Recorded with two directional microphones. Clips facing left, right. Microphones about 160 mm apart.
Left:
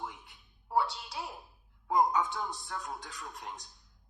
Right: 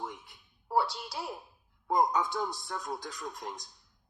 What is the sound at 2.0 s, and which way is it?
A man's voice, 35° right (ahead or behind).